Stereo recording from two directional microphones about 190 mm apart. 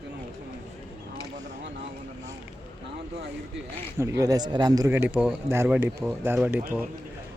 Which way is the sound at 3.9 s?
15° right (ahead or behind).